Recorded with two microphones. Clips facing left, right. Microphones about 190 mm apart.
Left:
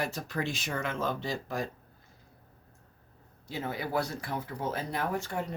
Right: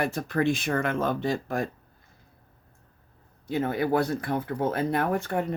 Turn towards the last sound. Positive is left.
turn(degrees=-60)  # may be behind; listen again after turning